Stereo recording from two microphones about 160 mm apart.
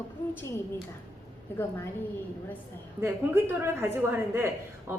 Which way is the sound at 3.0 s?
15° right (ahead or behind).